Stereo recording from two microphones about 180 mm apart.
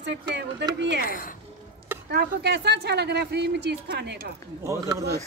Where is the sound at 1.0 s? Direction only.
50° left (ahead or behind).